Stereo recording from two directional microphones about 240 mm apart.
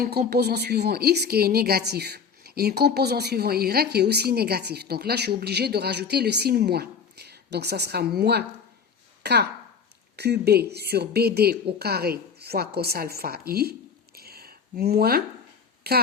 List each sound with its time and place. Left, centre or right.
0.0 s a woman's voice: right
14.2 s a sound: right
15.9 s a woman's voice: right